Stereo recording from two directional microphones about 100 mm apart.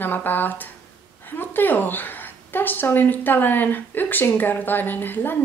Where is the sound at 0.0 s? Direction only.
20° left (ahead or behind).